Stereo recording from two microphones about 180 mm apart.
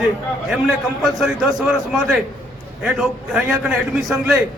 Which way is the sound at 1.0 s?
Centre (ahead or behind).